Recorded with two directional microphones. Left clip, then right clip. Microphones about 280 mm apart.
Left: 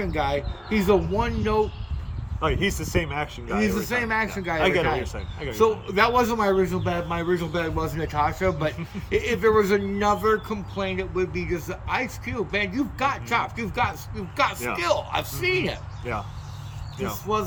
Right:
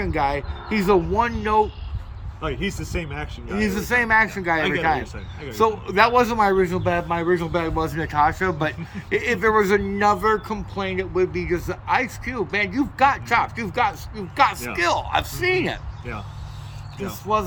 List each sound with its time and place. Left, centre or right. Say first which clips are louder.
0.0 s a man's voice: right 3 dB; centre
2.4 s speech: left 3 dB; centre
3.6 s a man's voice: right 4 dB; centre
4.6 s speech: right 1 dB; centre
5.5 s a man's voice: right 3 dB; centre
17.3 s speech: right 4 dB; centre